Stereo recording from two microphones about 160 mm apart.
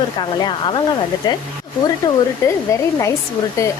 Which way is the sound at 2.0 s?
25° left (ahead or behind).